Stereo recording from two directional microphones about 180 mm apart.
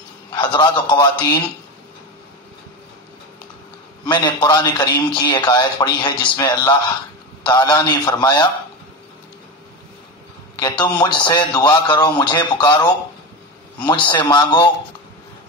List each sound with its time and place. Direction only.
0.3 s speech: 25° left (ahead or behind)
4.0 s speech: 25° left (ahead or behind)
10.6 s speech: 25° left (ahead or behind)
13.8 s speech: 25° left (ahead or behind)